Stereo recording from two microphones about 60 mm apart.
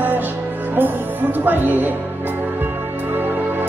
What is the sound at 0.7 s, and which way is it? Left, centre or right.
Speech, right.